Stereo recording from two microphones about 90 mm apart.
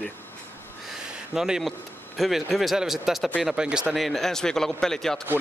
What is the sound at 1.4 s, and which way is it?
Speech, 5° right (ahead or behind).